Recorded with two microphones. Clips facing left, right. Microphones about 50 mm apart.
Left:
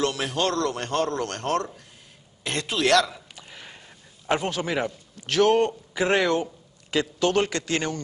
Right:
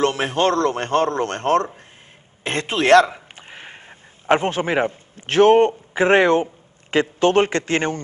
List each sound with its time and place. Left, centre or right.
0.0 s a man's voice: right